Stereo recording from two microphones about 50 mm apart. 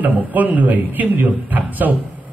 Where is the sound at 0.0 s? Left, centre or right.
Right.